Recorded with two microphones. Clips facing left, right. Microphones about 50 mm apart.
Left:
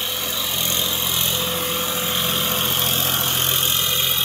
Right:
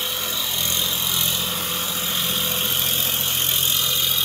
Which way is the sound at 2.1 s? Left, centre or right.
Left.